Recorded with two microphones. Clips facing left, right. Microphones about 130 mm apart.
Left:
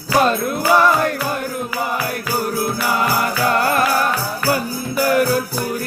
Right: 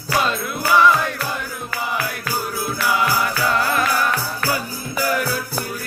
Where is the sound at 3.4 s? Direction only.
50° left (ahead or behind).